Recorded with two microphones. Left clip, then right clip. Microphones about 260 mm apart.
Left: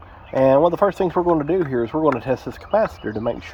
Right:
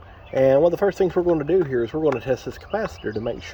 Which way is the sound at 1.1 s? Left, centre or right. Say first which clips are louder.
Left 1 dB; centre.